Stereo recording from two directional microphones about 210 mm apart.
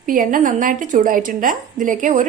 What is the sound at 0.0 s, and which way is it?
A woman's voice, 40° right (ahead or behind).